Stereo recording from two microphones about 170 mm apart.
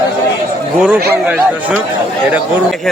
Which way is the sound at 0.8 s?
5° right (ahead or behind).